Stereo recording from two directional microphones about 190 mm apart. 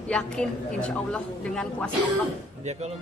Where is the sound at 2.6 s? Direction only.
35° right (ahead or behind).